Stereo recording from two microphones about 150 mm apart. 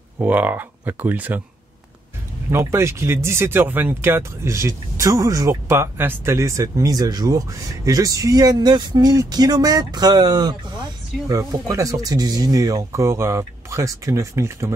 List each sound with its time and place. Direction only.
0.2 s speech: 10° right (ahead or behind)
2.5 s speech: 15° right (ahead or behind)